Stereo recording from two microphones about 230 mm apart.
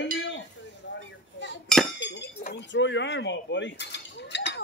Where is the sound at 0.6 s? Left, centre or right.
Left.